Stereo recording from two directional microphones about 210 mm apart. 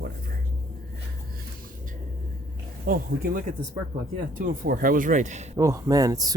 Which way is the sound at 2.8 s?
45° right (ahead or behind).